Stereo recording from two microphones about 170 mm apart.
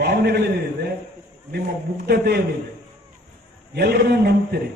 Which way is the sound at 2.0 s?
75° right (ahead or behind).